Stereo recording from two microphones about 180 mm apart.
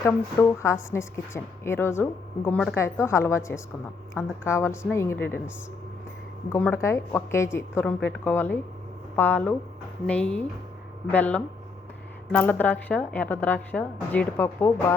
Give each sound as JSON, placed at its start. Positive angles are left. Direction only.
{"t": 0.0, "sound": "a woman's voice", "side_deg": 15}
{"t": 6.5, "sound": "a woman's voice", "side_deg": 15}